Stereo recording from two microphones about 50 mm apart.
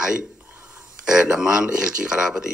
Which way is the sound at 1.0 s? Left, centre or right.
Centre.